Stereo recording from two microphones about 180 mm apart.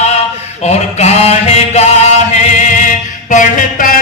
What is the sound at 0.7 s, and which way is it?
Mantra, 35° left (ahead or behind).